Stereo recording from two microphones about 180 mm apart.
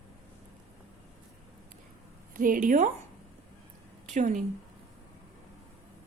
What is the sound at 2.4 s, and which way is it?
Speech, 50° right (ahead or behind).